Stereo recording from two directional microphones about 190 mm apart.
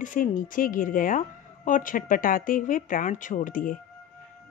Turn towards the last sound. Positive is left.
turn(degrees=45)  # may be behind; listen again after turning